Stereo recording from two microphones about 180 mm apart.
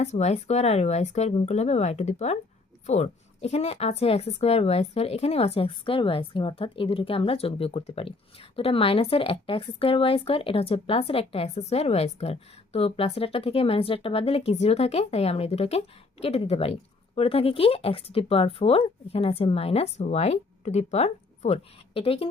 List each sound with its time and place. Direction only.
0.0 s speech: 40° left (ahead or behind)